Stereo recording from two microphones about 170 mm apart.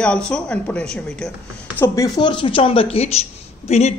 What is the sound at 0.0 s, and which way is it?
Speech, 5° left (ahead or behind).